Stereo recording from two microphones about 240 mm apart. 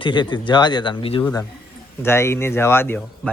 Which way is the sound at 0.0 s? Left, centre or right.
Centre.